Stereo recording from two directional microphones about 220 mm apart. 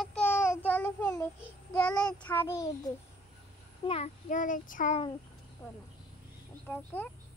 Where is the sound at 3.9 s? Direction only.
30° left (ahead or behind).